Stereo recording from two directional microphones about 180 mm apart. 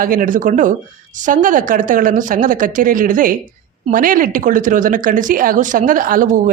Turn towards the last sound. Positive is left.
turn(degrees=-50)  # may be behind; listen again after turning